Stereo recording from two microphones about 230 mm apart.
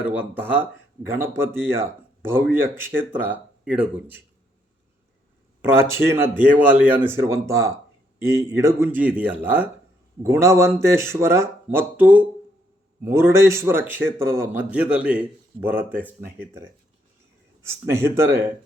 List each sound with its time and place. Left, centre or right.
0.0 s a man's voice: centre
5.7 s a man's voice: centre